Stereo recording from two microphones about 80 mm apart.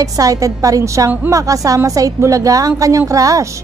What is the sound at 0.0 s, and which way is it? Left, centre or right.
A woman's voice, right.